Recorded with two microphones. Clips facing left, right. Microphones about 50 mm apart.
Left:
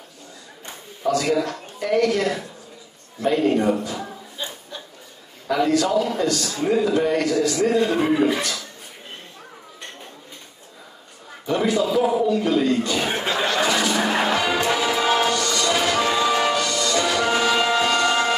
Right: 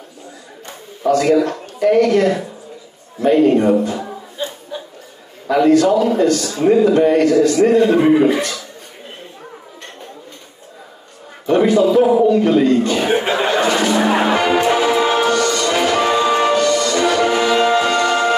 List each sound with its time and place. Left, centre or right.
1.0 s a man's voice: right
4.4 s chuckle: centre
5.5 s a man's voice: right
11.4 s a man's voice: right
13.1 s speech: right
13.6 s music: right